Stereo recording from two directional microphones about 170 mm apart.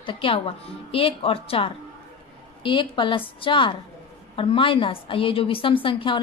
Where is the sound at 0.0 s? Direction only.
30° left (ahead or behind).